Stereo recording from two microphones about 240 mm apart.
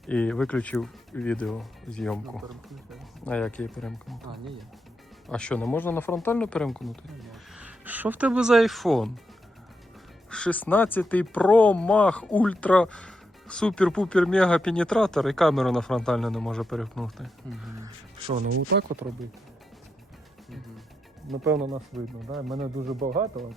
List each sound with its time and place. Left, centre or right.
0.1 s speech: centre
5.3 s speech: centre
10.2 s speech: centre
17.8 s speech: right
19.0 s speech: centre
21.3 s speech: centre
23.0 s speech: right